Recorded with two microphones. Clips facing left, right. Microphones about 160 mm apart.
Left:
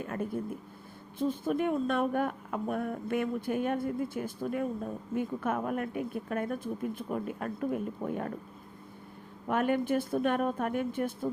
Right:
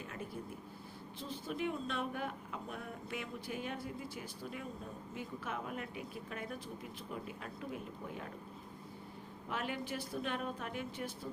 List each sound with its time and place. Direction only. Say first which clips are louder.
0.0 s a sound: left 11 dB; 50° left (ahead or behind)
1.2 s a woman's voice: left 11 dB; 50° left (ahead or behind)
9.5 s a woman's voice: left 12 dB; 50° left (ahead or behind)